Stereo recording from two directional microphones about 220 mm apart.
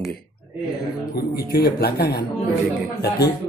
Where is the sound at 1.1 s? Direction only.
45° left (ahead or behind).